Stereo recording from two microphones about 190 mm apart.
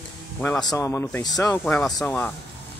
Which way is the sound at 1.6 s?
5° left (ahead or behind).